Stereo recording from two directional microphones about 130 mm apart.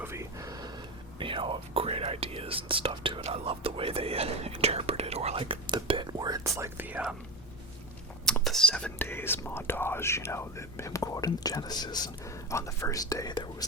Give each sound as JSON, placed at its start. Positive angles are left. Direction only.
{"t": 0.0, "sound": "a sound", "side_deg": -20}
{"t": 1.2, "sound": "speech", "side_deg": -40}
{"t": 8.2, "sound": "speech", "side_deg": 5}